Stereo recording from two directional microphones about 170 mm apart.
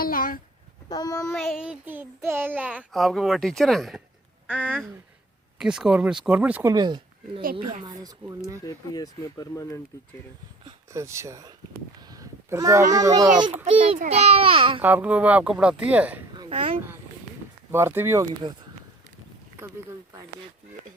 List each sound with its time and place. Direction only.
0.0 s a sound: 55° left (ahead or behind)
0.9 s speech: 20° left (ahead or behind)
1.3 s a child's voice: centre (ahead or behind); by 8.4 s 25° right (ahead or behind)
8.6 s speech: 20° left (ahead or behind)
10.9 s speech: 15° right (ahead or behind)
12.0 s a sound: 20° right (ahead or behind)
13.0 s speech: 20° right (ahead or behind)
13.7 s a child's voice: 35° right (ahead or behind)
14.8 s speech: 10° right (ahead or behind)
16.5 s a child's voice: 35° right (ahead or behind)
17.7 s speech: 15° right (ahead or behind)